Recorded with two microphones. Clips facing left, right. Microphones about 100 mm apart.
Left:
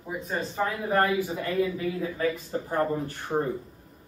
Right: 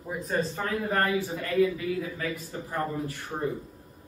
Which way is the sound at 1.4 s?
30° left (ahead or behind).